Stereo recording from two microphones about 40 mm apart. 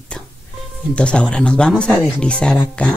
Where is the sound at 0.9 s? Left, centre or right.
Left.